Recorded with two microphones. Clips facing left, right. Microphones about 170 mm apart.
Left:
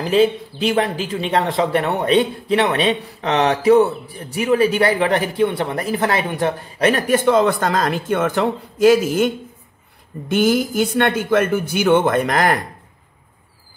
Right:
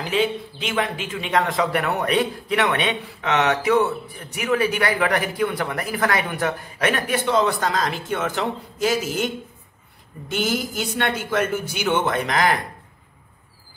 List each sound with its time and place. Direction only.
0.0 s speech: 35° left (ahead or behind)
7.2 s speech: 50° left (ahead or behind)